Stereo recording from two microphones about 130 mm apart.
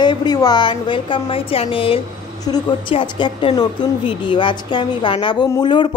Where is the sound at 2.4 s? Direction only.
30° left (ahead or behind).